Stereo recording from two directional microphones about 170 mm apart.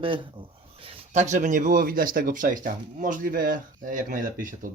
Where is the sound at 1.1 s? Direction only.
45° right (ahead or behind).